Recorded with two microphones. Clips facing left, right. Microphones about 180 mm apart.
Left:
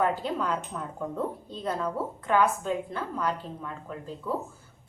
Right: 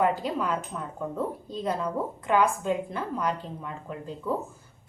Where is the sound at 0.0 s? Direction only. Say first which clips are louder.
Right 1 dB; 10° right (ahead or behind).